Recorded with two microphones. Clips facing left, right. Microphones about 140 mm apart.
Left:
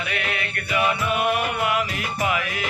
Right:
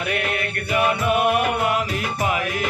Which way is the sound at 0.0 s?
50° right (ahead or behind).